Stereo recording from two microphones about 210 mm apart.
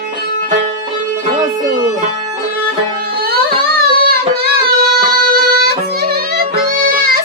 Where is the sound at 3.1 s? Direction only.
45° right (ahead or behind).